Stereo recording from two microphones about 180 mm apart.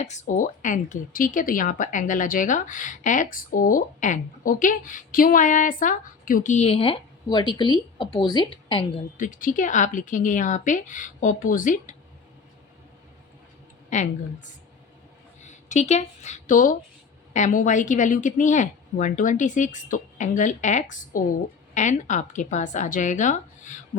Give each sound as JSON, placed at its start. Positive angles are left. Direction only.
{"t": 0.0, "sound": "a woman's voice", "side_deg": 40}
{"t": 9.1, "sound": "speech", "side_deg": 45}
{"t": 13.9, "sound": "speech", "side_deg": 40}
{"t": 15.4, "sound": "speech", "side_deg": 40}